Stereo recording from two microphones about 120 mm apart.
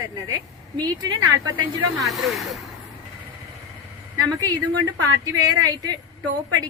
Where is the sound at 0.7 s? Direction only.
35° right (ahead or behind).